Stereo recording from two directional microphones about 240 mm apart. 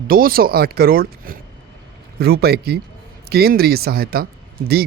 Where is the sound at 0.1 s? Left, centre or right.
Right.